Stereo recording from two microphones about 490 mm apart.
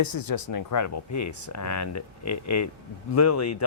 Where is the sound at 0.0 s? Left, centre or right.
Left.